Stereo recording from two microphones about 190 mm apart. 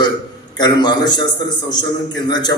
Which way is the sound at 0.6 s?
20° left (ahead or behind).